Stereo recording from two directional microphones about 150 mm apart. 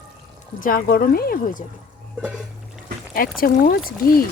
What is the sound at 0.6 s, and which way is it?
Speech, 75° left (ahead or behind).